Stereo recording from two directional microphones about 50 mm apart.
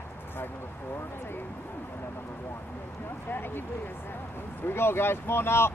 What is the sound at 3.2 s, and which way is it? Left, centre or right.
Speech, left.